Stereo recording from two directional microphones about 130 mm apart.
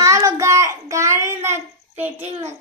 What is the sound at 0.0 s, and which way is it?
Child singing, 25° right (ahead or behind).